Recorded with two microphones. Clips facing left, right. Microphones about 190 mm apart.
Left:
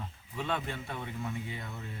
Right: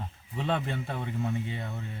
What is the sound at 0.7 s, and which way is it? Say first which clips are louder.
Speech: right 5 dB; 35° right (ahead or behind).